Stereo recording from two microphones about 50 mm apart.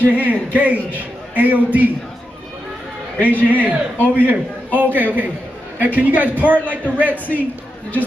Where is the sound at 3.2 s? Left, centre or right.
Left.